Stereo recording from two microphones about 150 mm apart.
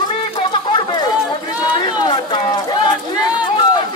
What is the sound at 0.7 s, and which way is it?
Chatter, 30° left (ahead or behind).